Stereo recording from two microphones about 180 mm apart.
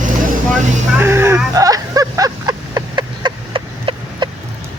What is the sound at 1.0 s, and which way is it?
Vehicle, 15° right (ahead or behind).